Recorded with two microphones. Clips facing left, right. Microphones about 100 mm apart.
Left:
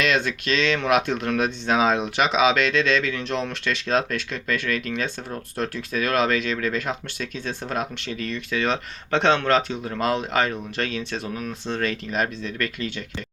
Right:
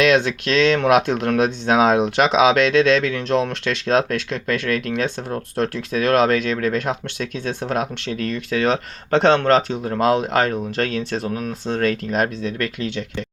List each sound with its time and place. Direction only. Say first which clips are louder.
0.0 s speech: right 6 dB; 60° right (ahead or behind)